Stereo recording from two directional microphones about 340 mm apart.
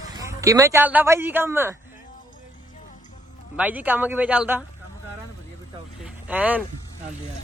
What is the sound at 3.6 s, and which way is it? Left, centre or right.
Speech, centre.